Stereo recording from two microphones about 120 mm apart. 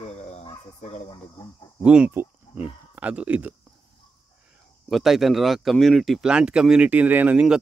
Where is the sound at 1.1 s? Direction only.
35° left (ahead or behind).